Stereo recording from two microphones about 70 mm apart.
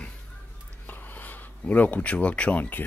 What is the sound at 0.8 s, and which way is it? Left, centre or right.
Speech, left.